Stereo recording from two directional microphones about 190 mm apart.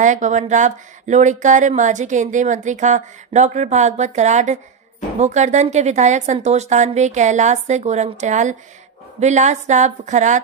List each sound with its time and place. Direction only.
0.0 s speech: 40° right (ahead or behind)